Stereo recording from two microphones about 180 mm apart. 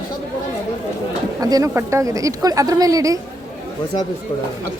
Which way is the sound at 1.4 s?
20° right (ahead or behind).